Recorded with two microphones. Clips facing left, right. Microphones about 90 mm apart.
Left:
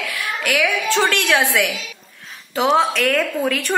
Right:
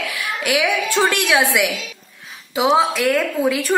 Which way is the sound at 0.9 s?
15° right (ahead or behind).